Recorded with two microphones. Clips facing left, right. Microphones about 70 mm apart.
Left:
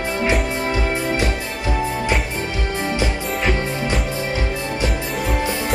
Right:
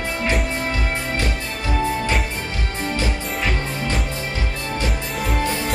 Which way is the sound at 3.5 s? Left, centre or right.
Centre.